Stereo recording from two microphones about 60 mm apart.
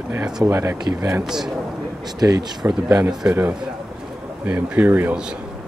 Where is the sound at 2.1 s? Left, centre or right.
Right.